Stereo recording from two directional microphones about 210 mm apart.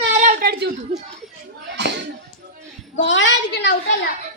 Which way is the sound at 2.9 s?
60° left (ahead or behind).